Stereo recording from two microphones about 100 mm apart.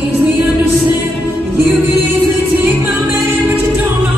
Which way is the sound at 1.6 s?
20° right (ahead or behind).